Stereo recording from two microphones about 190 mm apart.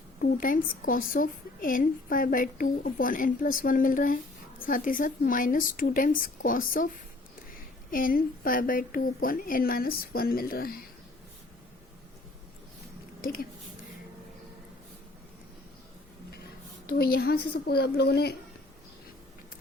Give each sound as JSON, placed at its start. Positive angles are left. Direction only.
{"t": 0.2, "sound": "a woman's voice", "side_deg": 45}
{"t": 13.2, "sound": "a woman's voice", "side_deg": 50}
{"t": 16.8, "sound": "speech", "side_deg": 55}